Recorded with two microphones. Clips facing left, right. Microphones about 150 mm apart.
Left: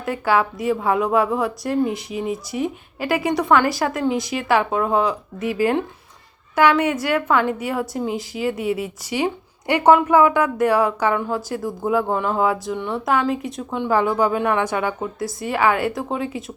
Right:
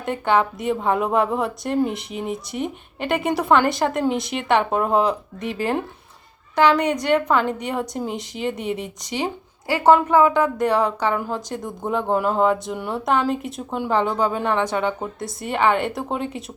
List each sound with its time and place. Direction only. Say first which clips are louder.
0.0 s a woman's voice: even; 5° left (ahead or behind)
9.6 s a woman's voice: left 1 dB; 20° left (ahead or behind); by 16.4 s centre (ahead or behind)